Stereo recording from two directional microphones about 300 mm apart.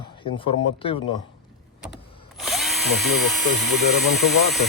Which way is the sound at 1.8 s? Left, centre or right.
Centre.